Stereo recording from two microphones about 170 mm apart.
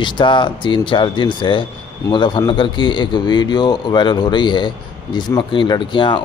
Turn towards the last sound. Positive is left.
turn(degrees=30)  # may be behind; listen again after turning